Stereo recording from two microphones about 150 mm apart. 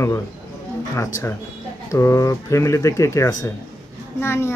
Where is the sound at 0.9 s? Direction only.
20° left (ahead or behind).